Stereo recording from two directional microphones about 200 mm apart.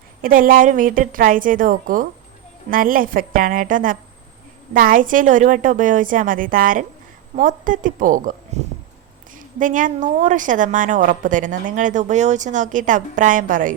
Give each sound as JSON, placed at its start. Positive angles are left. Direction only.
{"t": 0.2, "sound": "a woman's voice", "side_deg": -45}